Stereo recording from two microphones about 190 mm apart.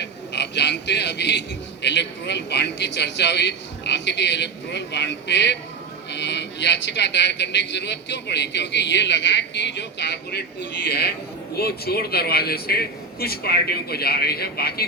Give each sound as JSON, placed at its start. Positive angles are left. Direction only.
{"t": 0.0, "sound": "a man's voice", "side_deg": 65}